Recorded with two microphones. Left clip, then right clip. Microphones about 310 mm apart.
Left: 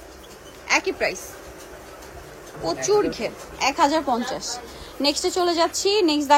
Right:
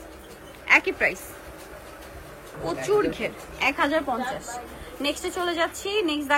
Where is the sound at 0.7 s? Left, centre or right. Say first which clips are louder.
Right 2 dB; centre.